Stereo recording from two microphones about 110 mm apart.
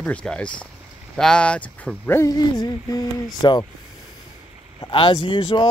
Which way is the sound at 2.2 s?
30° left (ahead or behind).